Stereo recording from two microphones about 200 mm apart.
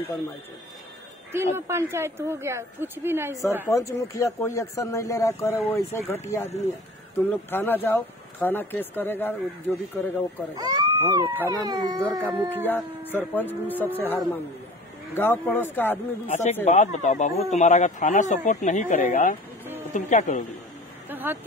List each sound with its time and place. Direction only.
1.3 s a woman's voice: 10° right (ahead or behind)
3.6 s speech: 15° left (ahead or behind)
10.5 s a woman's voice: 20° right (ahead or behind)
12.6 s speech: 10° left (ahead or behind)
16.6 s speech: 35° left (ahead or behind)
21.1 s a sound: 10° right (ahead or behind)